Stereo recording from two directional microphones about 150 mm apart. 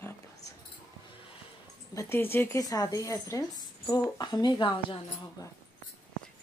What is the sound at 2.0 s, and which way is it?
Speech, 15° left (ahead or behind).